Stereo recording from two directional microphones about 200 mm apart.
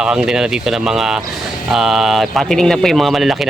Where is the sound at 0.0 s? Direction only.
5° right (ahead or behind).